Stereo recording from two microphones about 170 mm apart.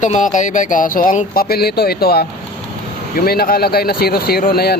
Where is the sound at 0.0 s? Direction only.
50° left (ahead or behind).